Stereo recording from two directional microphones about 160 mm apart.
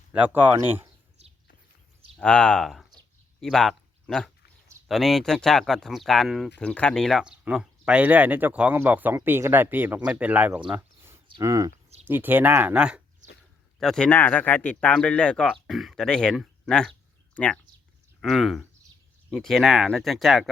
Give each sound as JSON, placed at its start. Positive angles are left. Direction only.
{"t": 0.1, "sound": "speech", "side_deg": -10}
{"t": 2.1, "sound": "speech", "side_deg": 5}
{"t": 10.7, "sound": "a sound", "side_deg": -15}
{"t": 11.3, "sound": "speech", "side_deg": -20}